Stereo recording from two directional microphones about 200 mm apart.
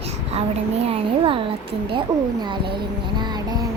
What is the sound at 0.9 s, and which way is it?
A child's voice, 25° right (ahead or behind).